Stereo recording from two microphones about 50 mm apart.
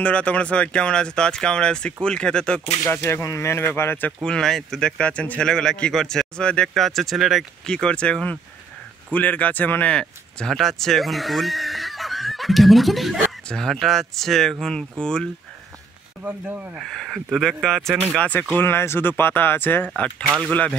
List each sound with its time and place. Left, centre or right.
0.0 s speech: left
2.8 s speech: left
4.2 s speech: centre; by 5.4 s left
5.4 s speech: centre
6.7 s speech: centre
7.6 s speech: centre
9.1 s speech: left
9.8 s speech: centre
10.5 s speech: centre
16.9 s speech: centre
18.6 s speech: left